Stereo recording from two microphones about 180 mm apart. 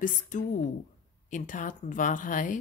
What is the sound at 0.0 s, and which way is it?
A woman's voice, 45° left (ahead or behind).